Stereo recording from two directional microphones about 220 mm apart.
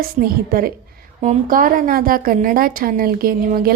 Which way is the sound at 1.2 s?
35° right (ahead or behind).